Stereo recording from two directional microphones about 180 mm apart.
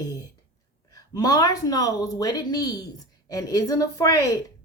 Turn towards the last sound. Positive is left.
turn(degrees=20)  # may be behind; listen again after turning